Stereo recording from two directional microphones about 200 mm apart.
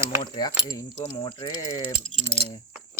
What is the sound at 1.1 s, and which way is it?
Speech, 25° left (ahead or behind).